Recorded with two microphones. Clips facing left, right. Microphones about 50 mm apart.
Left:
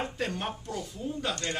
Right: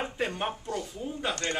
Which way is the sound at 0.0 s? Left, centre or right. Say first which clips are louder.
Right 2 dB; centre.